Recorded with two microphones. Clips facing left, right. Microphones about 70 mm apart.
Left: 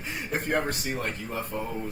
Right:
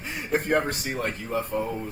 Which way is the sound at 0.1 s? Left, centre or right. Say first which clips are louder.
Right 4 dB; right.